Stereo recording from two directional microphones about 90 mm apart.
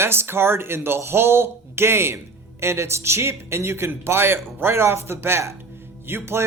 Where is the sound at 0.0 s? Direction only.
25° right (ahead or behind).